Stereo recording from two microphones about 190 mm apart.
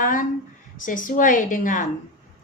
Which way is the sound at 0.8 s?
45° left (ahead or behind).